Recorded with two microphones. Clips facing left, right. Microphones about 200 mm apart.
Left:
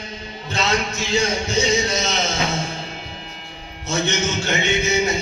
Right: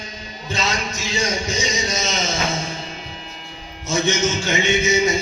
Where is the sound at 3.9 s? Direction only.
60° left (ahead or behind).